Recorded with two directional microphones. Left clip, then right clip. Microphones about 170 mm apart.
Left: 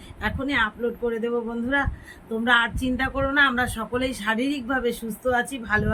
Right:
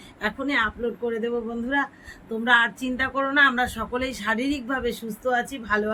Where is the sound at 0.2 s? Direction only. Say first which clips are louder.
Even; 5° right (ahead or behind).